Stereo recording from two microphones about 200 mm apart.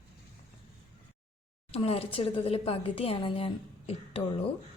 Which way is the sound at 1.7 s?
30° left (ahead or behind).